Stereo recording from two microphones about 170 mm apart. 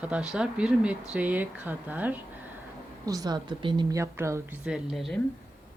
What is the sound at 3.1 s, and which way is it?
A woman's voice, 20° right (ahead or behind).